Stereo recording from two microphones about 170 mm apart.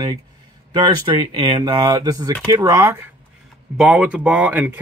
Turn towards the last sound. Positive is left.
turn(degrees=-10)  # may be behind; listen again after turning